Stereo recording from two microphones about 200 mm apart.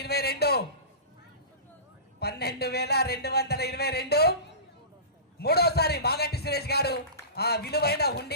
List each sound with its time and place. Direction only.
0.0 s a man's voice: 55° left (ahead or behind)
2.1 s a man's voice: 55° left (ahead or behind)